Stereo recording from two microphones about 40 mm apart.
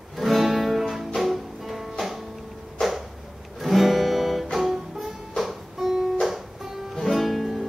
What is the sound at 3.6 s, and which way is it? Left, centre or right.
Music, centre.